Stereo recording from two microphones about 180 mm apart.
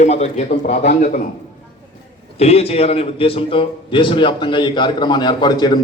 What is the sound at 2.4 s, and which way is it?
A man's voice, 35° left (ahead or behind).